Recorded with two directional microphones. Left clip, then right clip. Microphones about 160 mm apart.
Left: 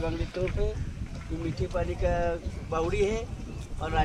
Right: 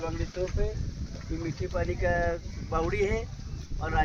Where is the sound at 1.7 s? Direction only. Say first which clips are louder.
Right 1 dB; 25° right (ahead or behind).